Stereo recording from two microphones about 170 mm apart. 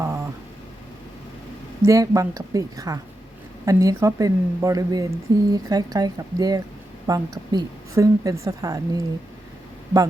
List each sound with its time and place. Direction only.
1.8 s speech: 20° right (ahead or behind)